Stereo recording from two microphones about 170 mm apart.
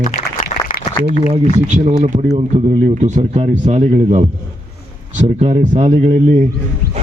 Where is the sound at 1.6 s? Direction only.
45° right (ahead or behind).